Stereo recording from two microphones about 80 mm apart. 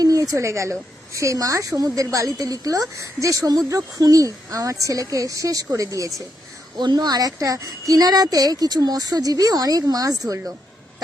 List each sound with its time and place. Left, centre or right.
0.0 s a woman's voice: right
6.7 s a woman's voice: right